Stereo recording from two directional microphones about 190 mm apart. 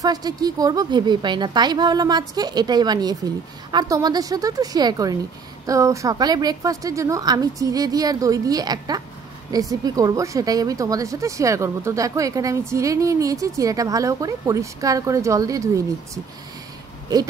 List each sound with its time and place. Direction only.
0.0 s a woman's voice: 20° right (ahead or behind)